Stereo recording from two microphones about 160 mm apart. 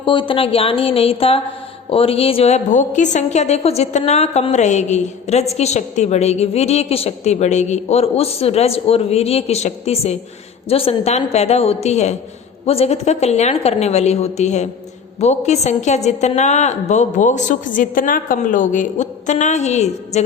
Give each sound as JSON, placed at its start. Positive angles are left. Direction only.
{"t": 0.0, "sound": "a woman's voice", "side_deg": 30}